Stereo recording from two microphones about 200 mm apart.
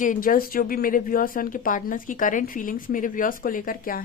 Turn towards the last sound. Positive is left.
turn(degrees=45)  # may be behind; listen again after turning